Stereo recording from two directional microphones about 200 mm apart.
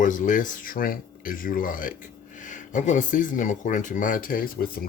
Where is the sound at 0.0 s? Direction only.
40° left (ahead or behind).